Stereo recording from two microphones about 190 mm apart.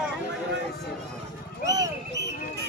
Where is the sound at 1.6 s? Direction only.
20° right (ahead or behind).